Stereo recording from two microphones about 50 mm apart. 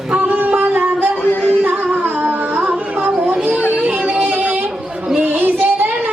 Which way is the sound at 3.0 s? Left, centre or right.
Centre.